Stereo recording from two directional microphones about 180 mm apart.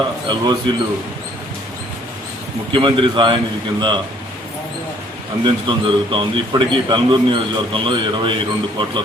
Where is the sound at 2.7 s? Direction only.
25° right (ahead or behind).